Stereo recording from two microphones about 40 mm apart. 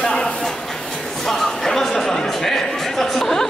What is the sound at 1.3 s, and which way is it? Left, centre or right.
Music, centre.